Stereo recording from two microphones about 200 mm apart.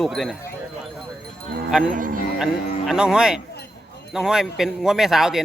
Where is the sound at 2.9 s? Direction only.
5° right (ahead or behind).